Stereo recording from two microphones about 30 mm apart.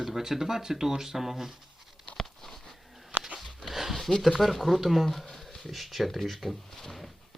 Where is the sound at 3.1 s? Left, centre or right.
Right.